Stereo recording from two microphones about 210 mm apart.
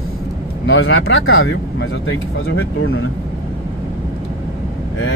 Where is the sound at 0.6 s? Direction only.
65° left (ahead or behind).